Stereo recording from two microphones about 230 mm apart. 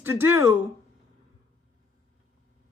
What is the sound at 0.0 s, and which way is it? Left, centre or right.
Speech, centre.